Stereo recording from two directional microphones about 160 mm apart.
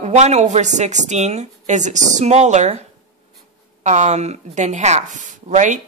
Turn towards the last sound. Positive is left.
turn(degrees=-50)  # may be behind; listen again after turning